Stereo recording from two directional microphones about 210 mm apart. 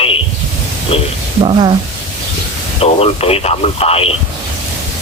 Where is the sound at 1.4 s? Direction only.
25° right (ahead or behind).